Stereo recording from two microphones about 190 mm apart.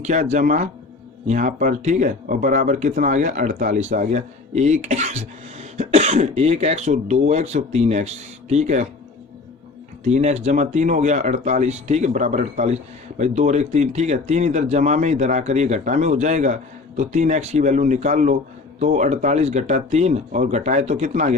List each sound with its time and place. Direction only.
0.0 s speech: 40° right (ahead or behind)
10.0 s speech: 35° right (ahead or behind)